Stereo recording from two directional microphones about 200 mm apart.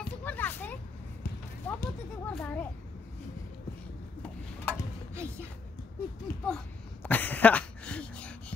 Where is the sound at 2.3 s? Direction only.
10° left (ahead or behind).